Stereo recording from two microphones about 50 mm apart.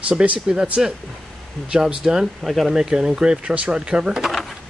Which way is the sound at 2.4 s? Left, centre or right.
Centre.